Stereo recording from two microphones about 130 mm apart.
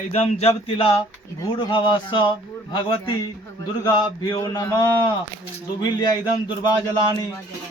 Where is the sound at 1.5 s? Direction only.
40° left (ahead or behind).